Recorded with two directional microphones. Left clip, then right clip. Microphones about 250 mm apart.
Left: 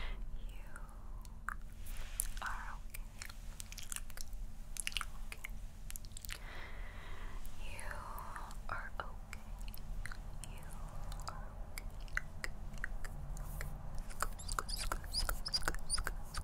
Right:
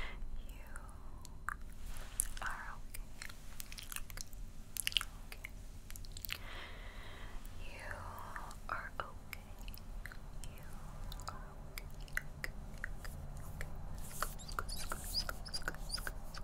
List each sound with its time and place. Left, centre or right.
1.5 s chewing: centre
2.3 s biting: centre
4.7 s chewing: centre
6.2 s whispering: centre
11.2 s chewing: centre
13.6 s mouse: centre